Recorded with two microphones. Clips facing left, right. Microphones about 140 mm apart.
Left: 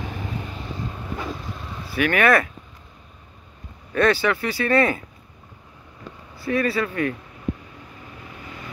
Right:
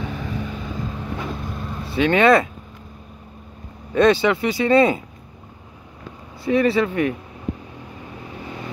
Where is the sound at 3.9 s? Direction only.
20° right (ahead or behind).